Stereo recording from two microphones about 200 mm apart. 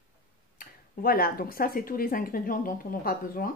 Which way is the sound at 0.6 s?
45° left (ahead or behind).